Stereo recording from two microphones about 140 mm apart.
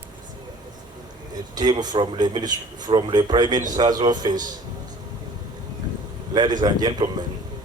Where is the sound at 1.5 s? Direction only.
30° right (ahead or behind).